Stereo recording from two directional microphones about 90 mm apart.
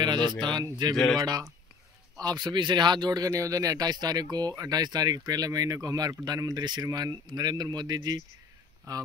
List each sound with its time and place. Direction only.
0.0 s speech: 55° right (ahead or behind)
0.9 s speech: 5° left (ahead or behind)
1.2 s speech: 45° right (ahead or behind)